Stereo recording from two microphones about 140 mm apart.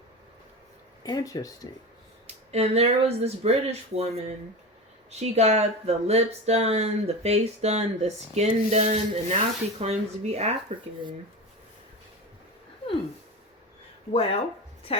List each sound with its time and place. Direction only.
1.0 s speech: 25° left (ahead or behind)
2.2 s speech: 50° right (ahead or behind)
5.2 s speech: 50° right (ahead or behind)
14.1 s speech: 45° left (ahead or behind)